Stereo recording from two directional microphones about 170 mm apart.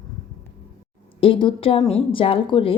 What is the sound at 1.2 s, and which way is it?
A woman's voice, 30° left (ahead or behind).